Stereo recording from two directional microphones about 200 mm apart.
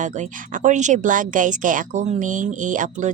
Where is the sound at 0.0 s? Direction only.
40° right (ahead or behind).